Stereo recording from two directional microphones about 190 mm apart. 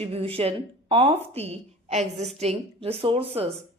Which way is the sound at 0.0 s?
30° right (ahead or behind).